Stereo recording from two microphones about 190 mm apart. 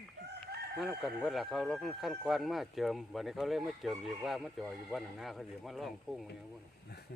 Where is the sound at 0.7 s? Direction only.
Centre (ahead or behind).